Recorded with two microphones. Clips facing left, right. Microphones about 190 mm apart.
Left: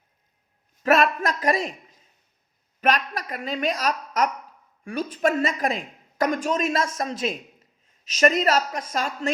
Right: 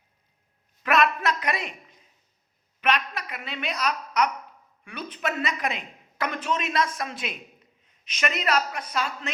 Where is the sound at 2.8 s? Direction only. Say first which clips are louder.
Left 3 dB; 40° left (ahead or behind).